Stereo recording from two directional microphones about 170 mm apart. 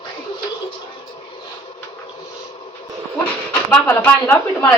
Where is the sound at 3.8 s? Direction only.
10° left (ahead or behind).